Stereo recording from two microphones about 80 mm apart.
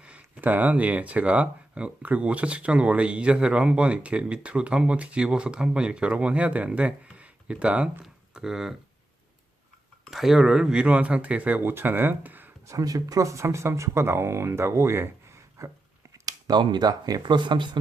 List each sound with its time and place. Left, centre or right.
0.0 s speech: centre
8.0 s a sound: centre
10.1 s speech: centre; by 12.5 s right
12.6 s speech: right
15.6 s a sound: right
16.2 s speech: right